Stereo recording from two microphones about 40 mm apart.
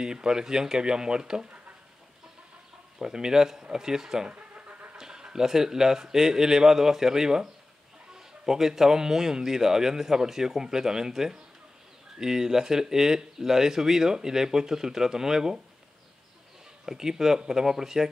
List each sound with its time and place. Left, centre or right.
0.0 s speech: centre
3.0 s speech: centre
4.3 s vehicle: right
4.9 s speech: centre
16.8 s speech: centre